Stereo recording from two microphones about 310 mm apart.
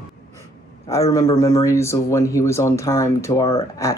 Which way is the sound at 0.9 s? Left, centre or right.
Centre.